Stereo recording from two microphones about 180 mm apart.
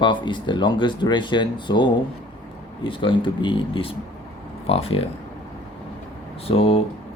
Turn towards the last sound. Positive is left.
turn(degrees=30)  # may be behind; listen again after turning